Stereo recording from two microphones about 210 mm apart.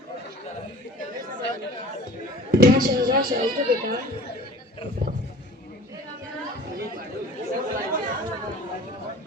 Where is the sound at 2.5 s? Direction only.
45° right (ahead or behind).